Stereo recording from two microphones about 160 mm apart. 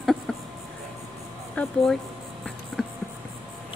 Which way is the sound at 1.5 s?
5° left (ahead or behind).